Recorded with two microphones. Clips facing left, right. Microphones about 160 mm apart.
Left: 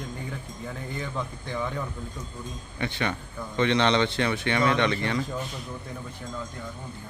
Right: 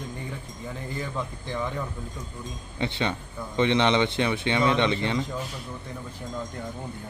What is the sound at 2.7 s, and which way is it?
A man's voice, 20° right (ahead or behind).